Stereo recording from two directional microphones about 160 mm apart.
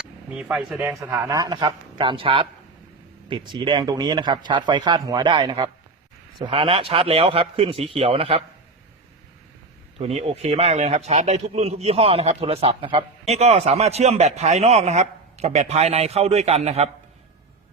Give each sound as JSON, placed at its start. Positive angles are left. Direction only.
{"t": 0.3, "sound": "speech", "side_deg": -5}
{"t": 1.0, "sound": "a man's voice", "side_deg": -20}
{"t": 10.0, "sound": "a man's voice", "side_deg": -40}